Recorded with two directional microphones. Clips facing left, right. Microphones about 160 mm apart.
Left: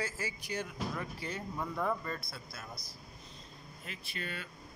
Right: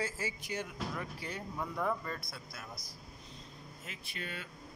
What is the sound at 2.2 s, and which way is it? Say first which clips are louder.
Speech: left 1 dB; 15° right (ahead or behind).